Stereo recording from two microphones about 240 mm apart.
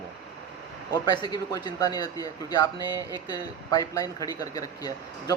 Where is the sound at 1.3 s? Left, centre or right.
Centre.